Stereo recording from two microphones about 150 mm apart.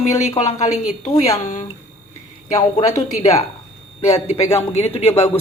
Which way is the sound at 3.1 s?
45° left (ahead or behind).